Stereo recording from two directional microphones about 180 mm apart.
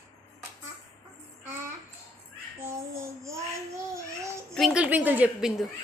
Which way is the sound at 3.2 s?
15° right (ahead or behind).